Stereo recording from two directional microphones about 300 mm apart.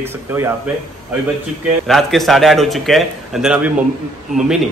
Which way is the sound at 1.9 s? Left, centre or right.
Centre.